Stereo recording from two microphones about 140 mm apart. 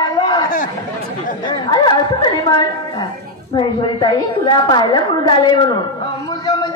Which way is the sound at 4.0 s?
30° left (ahead or behind).